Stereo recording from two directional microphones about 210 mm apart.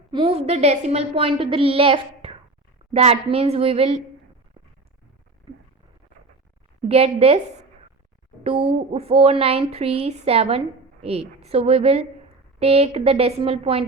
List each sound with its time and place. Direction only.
0.1 s a woman's voice: 25° right (ahead or behind)
6.8 s a woman's voice: 30° right (ahead or behind)
8.4 s a woman's voice: 25° right (ahead or behind)